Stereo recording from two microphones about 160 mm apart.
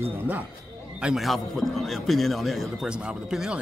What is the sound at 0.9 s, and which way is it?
A man's voice, 5° right (ahead or behind).